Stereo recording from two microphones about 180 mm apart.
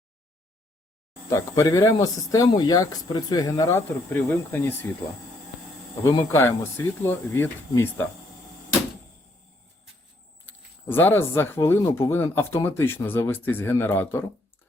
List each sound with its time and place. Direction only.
1.3 s speech: 20° left (ahead or behind)
6.1 s speech: 15° left (ahead or behind)
10.4 s speech: 10° left (ahead or behind)